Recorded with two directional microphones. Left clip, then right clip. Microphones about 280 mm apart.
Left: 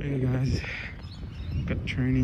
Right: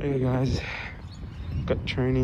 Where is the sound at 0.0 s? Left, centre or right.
Centre.